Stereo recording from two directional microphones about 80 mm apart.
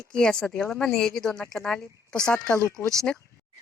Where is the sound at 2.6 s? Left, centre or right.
Left.